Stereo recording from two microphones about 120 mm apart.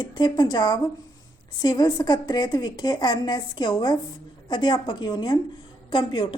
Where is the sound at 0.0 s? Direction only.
35° left (ahead or behind).